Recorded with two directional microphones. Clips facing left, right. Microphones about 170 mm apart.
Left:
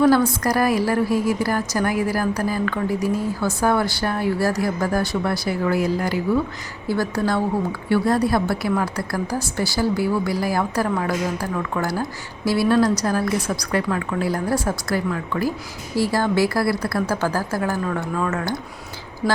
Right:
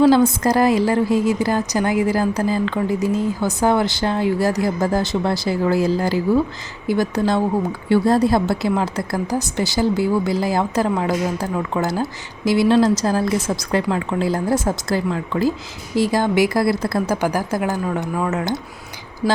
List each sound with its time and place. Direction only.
0.1 s a woman's voice: 20° right (ahead or behind)
6.8 s a woman's voice: 15° right (ahead or behind)